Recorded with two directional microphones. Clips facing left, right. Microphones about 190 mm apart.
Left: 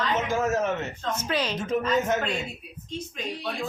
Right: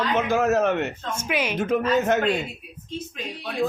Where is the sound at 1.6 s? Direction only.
65° right (ahead or behind).